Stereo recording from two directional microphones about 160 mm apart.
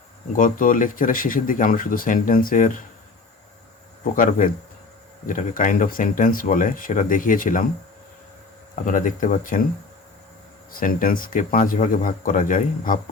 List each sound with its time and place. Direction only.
0.3 s speech: 60° left (ahead or behind)
4.0 s speech: 60° left (ahead or behind)
8.8 s speech: 55° left (ahead or behind)
10.7 s speech: 65° left (ahead or behind)